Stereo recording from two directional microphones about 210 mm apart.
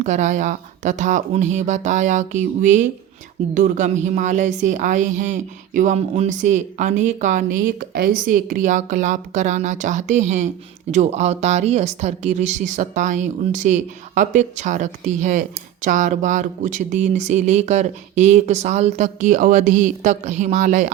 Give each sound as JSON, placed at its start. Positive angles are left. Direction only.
{"t": 0.0, "sound": "speech", "side_deg": -35}